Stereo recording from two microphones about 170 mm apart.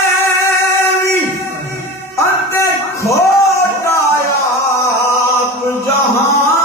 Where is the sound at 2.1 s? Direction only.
15° left (ahead or behind).